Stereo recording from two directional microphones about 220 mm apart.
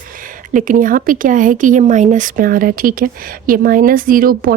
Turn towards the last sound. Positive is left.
turn(degrees=-40)  # may be behind; listen again after turning